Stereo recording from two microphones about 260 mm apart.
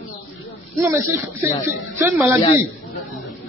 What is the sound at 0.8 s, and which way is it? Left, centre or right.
Speech, centre.